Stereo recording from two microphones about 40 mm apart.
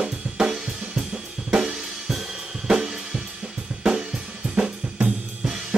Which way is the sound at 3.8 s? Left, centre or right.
Centre.